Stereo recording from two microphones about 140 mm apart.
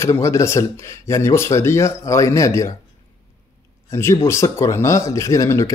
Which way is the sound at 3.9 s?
20° left (ahead or behind).